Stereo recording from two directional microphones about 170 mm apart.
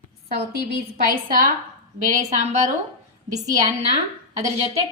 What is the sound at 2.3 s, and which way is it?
Speech, 45° right (ahead or behind).